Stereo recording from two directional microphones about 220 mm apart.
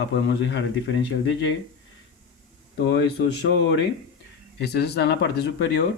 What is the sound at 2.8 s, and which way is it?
Speech, 50° left (ahead or behind).